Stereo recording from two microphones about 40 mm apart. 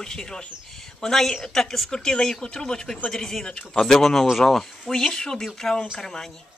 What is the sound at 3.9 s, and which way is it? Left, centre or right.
A woman's voice, centre.